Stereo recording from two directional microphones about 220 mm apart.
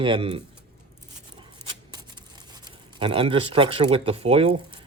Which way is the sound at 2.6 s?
25° right (ahead or behind).